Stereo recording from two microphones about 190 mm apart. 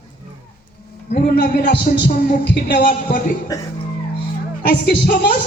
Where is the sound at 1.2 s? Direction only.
60° left (ahead or behind).